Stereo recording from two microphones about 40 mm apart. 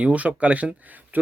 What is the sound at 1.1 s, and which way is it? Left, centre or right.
Speech, right.